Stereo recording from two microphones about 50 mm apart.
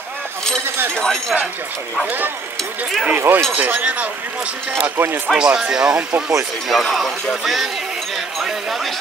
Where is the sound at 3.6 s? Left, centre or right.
Right.